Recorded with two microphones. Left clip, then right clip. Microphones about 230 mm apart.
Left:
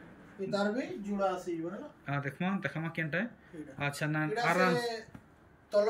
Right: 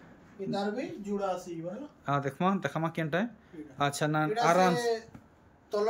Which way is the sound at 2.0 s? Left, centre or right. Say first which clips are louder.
Right 8 dB; centre.